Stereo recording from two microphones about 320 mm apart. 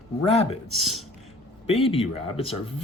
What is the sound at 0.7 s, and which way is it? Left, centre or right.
Speech, centre.